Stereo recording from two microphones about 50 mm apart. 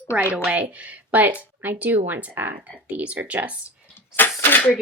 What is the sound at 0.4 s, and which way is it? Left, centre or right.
Speech, right.